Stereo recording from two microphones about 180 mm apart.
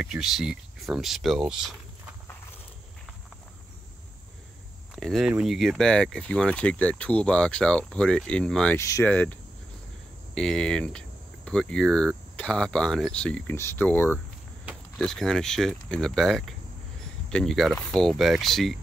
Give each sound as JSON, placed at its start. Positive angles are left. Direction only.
{"t": 0.0, "sound": "speech", "side_deg": -5}
{"t": 4.9, "sound": "speech", "side_deg": 0}
{"t": 8.7, "sound": "speech", "side_deg": 15}